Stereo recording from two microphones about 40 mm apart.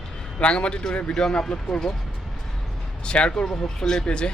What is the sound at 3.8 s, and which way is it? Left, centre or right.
Speech, centre.